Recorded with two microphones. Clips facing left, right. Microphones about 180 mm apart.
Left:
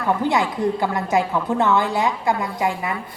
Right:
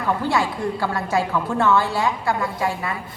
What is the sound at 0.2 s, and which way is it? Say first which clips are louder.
A woman's voice: left 2 dB; 20° left (ahead or behind).